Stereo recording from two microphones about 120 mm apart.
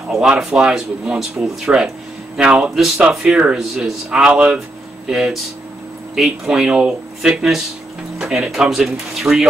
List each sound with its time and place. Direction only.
0.1 s speech: 5° right (ahead or behind)